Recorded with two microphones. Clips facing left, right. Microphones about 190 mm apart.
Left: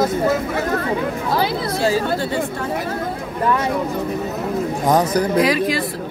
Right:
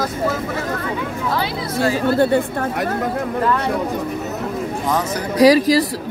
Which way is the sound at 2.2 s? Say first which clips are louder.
Right 6 dB; 60° right (ahead or behind).